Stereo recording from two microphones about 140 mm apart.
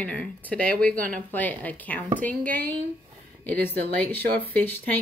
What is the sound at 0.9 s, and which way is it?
Speech, 80° right.